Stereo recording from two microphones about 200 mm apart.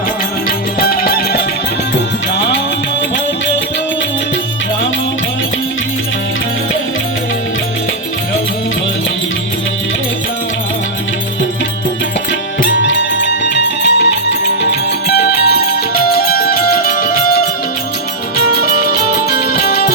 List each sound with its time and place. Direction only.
0.8 s music: 50° left (ahead or behind)
12.9 s music: 60° left (ahead or behind)
15.1 s music: 50° left (ahead or behind)
19.4 s music: 50° left (ahead or behind)